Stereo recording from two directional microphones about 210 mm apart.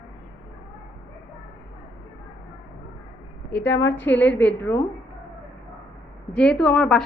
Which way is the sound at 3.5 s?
10° left (ahead or behind).